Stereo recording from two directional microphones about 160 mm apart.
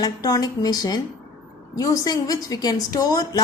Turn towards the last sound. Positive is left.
turn(degrees=25)  # may be behind; listen again after turning